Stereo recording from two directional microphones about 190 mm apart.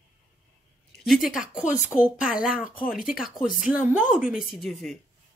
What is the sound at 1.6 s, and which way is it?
Speech, 40° left (ahead or behind).